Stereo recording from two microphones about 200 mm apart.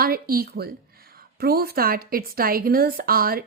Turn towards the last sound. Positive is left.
turn(degrees=-45)  # may be behind; listen again after turning